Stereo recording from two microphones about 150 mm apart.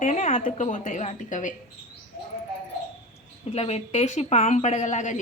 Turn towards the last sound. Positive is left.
turn(degrees=55)  # may be behind; listen again after turning